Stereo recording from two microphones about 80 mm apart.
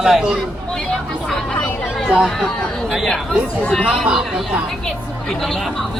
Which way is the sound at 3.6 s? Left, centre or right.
Centre.